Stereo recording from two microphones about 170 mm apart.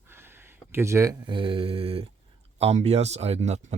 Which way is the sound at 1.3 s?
30° right (ahead or behind).